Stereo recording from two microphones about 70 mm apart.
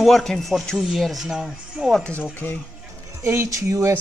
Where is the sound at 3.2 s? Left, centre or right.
Right.